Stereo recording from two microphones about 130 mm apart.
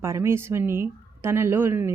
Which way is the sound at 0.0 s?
20° right (ahead or behind).